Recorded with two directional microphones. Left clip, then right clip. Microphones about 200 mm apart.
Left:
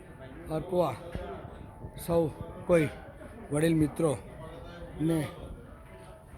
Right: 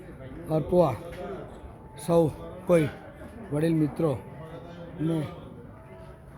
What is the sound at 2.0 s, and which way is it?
Speech, 5° right (ahead or behind).